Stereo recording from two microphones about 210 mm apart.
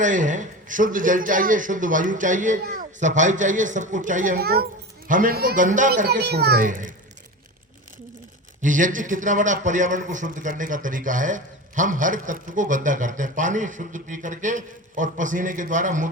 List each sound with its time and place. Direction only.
0.0 s a man's voice: 35° right (ahead or behind)
8.6 s a man's voice: 40° right (ahead or behind)